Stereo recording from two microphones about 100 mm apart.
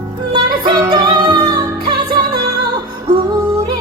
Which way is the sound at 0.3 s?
50° right (ahead or behind).